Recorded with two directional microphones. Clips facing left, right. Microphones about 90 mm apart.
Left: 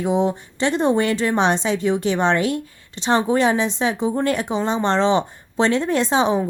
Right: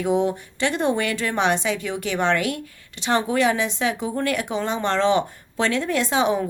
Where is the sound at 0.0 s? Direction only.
25° left (ahead or behind).